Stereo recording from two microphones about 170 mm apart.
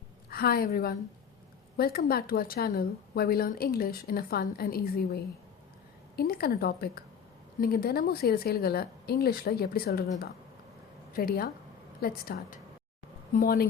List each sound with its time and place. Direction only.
0.3 s a woman's voice: 65° left (ahead or behind)